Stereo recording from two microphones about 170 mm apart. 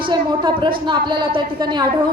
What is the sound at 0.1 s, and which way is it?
A woman's voice, 25° right (ahead or behind).